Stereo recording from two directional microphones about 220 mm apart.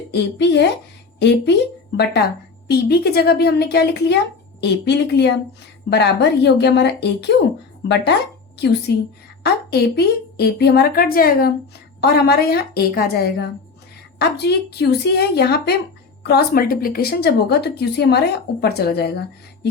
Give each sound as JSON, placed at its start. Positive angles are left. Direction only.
{"t": 0.1, "sound": "a woman's voice", "side_deg": 50}
{"t": 2.6, "sound": "a woman's voice", "side_deg": 45}